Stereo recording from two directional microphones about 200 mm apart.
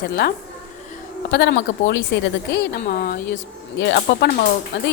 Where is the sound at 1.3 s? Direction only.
60° left (ahead or behind).